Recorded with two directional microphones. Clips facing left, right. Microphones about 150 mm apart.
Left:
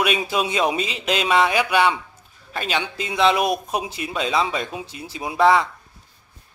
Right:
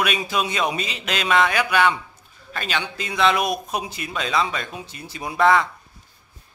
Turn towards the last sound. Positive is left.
turn(degrees=5)  # may be behind; listen again after turning